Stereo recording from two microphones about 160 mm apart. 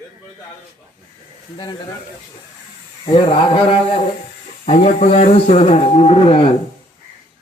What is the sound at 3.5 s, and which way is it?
Speech, 35° left (ahead or behind).